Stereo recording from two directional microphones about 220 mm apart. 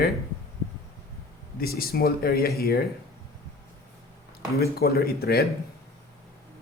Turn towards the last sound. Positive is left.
turn(degrees=45)  # may be behind; listen again after turning